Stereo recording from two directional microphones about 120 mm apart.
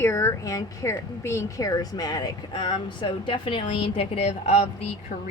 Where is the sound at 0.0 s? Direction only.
20° left (ahead or behind).